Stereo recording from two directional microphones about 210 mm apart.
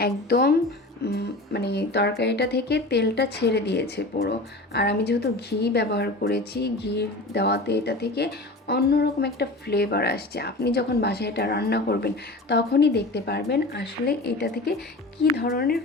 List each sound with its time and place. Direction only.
0.0 s speech: 50° left (ahead or behind)